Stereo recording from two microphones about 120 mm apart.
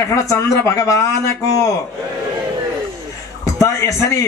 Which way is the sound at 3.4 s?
25° left (ahead or behind).